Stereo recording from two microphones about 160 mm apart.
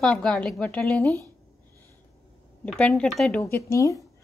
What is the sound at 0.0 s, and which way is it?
A woman's voice, 5° left (ahead or behind).